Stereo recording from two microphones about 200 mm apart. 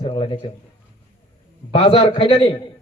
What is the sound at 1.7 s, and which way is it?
Speech, 25° left (ahead or behind).